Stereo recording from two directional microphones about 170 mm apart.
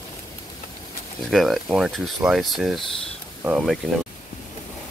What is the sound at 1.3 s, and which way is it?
Speech, centre (ahead or behind).